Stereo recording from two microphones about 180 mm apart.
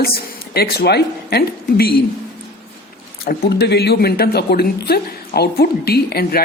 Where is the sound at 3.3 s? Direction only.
65° left (ahead or behind).